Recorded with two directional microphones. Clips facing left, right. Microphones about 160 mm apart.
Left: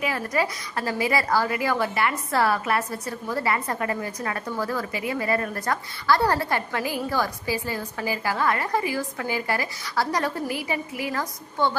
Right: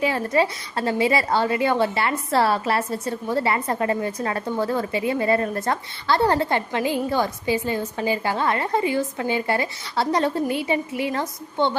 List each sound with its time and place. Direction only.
0.0 s a woman's voice: 25° right (ahead or behind)